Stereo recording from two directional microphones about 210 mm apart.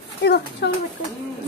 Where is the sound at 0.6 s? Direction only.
55° left (ahead or behind).